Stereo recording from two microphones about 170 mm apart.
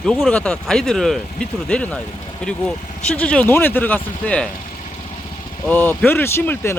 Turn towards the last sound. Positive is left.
turn(degrees=10)  # may be behind; listen again after turning